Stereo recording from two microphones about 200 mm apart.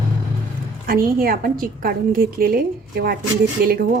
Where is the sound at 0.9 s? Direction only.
45° right (ahead or behind).